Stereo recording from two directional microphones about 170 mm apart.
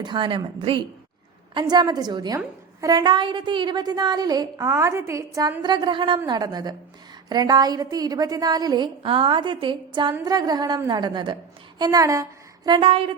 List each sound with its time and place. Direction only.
0.0 s a woman's voice: 30° right (ahead or behind)
5.6 s a woman's voice: 25° right (ahead or behind)